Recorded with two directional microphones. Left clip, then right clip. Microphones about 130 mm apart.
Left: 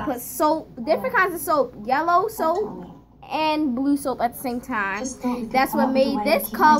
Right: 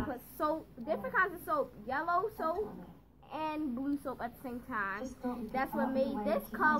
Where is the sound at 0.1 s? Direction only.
35° left (ahead or behind).